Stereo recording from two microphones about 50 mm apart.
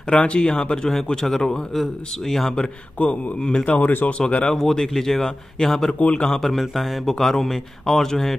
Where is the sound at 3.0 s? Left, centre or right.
Left.